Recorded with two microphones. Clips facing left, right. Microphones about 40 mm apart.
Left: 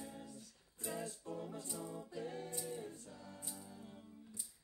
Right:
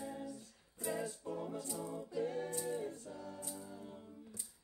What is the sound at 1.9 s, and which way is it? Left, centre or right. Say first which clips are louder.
A capella: right 10 dB; centre.